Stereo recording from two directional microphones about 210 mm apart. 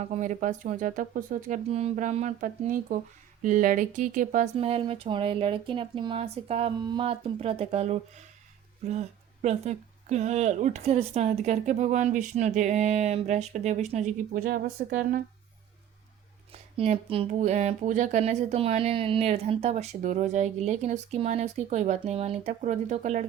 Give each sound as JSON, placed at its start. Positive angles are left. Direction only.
{"t": 0.0, "sound": "speech", "side_deg": -35}
{"t": 4.5, "sound": "speech", "side_deg": -25}
{"t": 16.5, "sound": "speech", "side_deg": -30}